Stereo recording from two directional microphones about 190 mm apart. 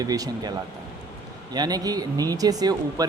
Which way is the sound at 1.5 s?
20° right (ahead or behind).